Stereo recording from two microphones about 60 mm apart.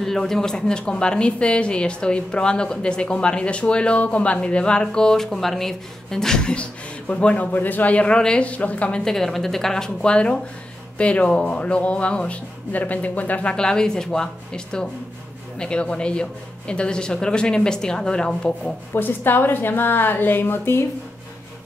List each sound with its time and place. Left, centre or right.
0.0 s a woman's voice: centre; by 9.0 s left
9.0 s a woman's voice: centre
18.9 s a woman's voice: left